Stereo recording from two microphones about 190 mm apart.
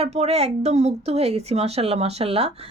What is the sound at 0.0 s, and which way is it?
Speech, 35° right (ahead or behind).